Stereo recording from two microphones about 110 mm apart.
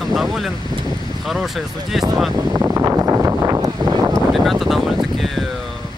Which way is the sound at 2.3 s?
30° right (ahead or behind).